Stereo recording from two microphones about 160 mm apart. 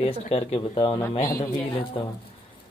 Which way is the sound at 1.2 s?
20° left (ahead or behind).